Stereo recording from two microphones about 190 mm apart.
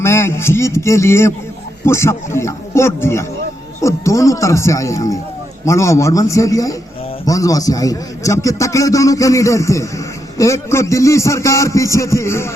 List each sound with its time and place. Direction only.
0.0 s a man's voice: 15° left (ahead or behind)